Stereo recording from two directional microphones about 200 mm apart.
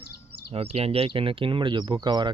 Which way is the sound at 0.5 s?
30° right (ahead or behind).